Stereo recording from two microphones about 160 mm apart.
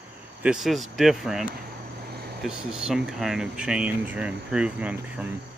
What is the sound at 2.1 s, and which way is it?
Air conditioning, 85° right.